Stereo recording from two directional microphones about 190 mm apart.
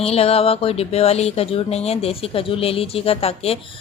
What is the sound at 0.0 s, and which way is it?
Speech, 30° left (ahead or behind).